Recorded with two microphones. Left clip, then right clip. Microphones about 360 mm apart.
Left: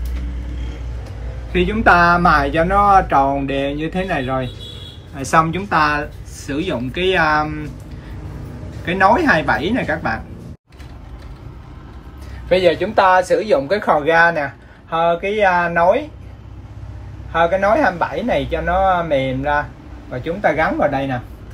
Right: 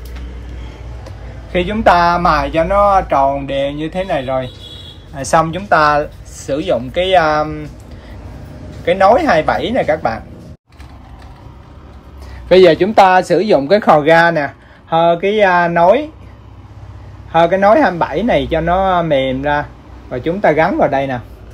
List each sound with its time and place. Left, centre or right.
1.5 s speech: centre
8.8 s speech: centre
12.4 s speech: right
17.3 s speech: right